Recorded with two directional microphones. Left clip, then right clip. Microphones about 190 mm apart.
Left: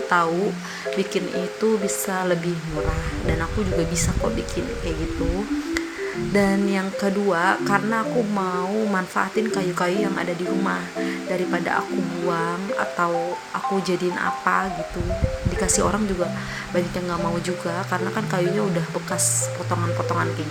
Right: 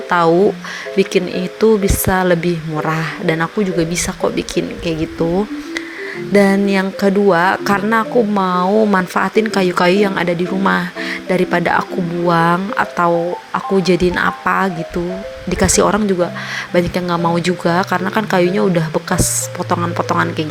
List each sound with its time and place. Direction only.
0.1 s speech: 35° right (ahead or behind)
6.3 s speech: 35° right (ahead or behind)
19.7 s speech: 40° right (ahead or behind)